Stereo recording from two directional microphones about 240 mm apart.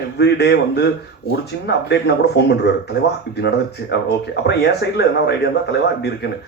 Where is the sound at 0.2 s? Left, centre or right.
Left.